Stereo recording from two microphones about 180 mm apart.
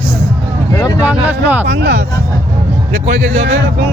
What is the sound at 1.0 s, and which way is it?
Speech, 10° right (ahead or behind).